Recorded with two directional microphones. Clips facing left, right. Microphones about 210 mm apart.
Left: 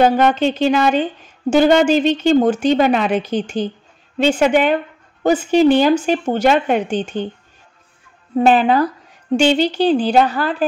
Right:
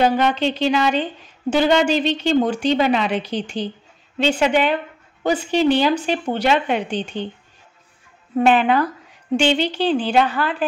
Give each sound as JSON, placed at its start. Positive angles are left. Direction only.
{"t": 0.0, "sound": "speech", "side_deg": 50}
{"t": 8.4, "sound": "a woman's voice", "side_deg": 35}